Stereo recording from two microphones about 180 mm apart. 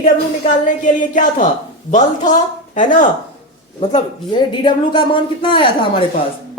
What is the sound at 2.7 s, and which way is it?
A woman's voice, 45° left (ahead or behind).